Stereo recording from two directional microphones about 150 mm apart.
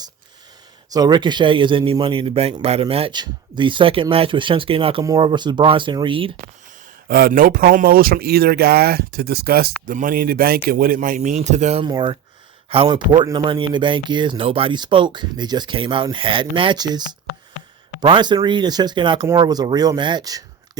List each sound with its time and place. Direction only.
0.9 s speech: 25° right (ahead or behind)
7.1 s speech: 80° right; by 11.9 s 45° right (ahead or behind)
11.9 s speech: 30° right (ahead or behind)